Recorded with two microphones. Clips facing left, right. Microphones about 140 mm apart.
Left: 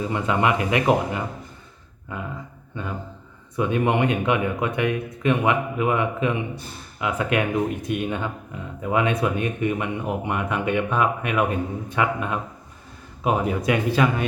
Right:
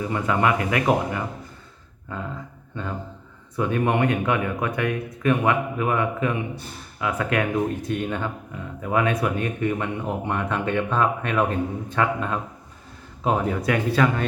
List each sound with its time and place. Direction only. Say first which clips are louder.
0.0 s speech: even; 20° left (ahead or behind)
3.5 s speech: left 1 dB; 20° left (ahead or behind)